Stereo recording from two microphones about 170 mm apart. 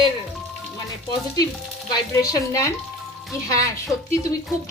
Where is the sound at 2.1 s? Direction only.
20° left (ahead or behind).